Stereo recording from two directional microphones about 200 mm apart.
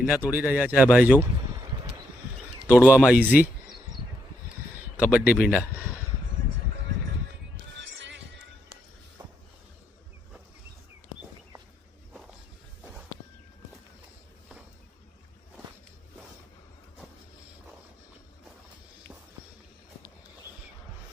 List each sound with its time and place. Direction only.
0.0 s speech: 5° right (ahead or behind)
2.8 s speech: 5° right (ahead or behind)